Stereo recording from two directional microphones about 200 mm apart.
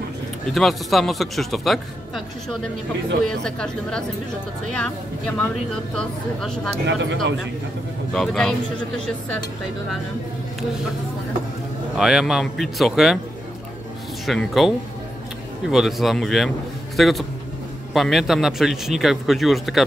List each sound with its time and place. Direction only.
0.5 s a man's voice: centre (ahead or behind)
5.9 s a man's voice: 5° left (ahead or behind)
6.9 s speech: 65° right (ahead or behind)
8.1 s a man's voice: 5° left (ahead or behind)
12.0 s a man's voice: centre (ahead or behind)
14.2 s a man's voice: centre (ahead or behind)